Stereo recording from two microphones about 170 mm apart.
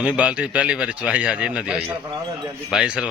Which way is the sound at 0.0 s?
5° right (ahead or behind).